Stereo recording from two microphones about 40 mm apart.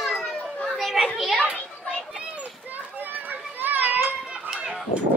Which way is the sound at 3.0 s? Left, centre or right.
Right.